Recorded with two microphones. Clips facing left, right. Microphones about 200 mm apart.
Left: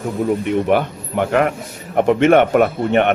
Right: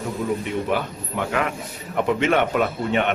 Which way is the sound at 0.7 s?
55° left (ahead or behind).